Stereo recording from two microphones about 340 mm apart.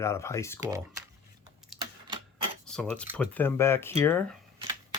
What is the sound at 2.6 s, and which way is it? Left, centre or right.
Speech, centre.